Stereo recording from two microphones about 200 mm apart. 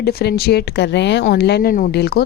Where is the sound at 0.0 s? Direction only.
50° left (ahead or behind).